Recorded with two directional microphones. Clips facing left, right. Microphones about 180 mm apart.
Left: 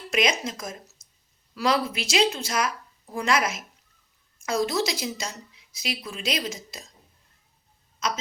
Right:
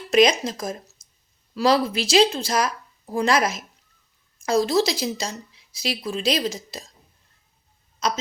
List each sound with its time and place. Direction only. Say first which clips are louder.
0.1 s speech: right 8 dB; 35° right (ahead or behind)
7.9 s speech: right 4 dB; 30° right (ahead or behind)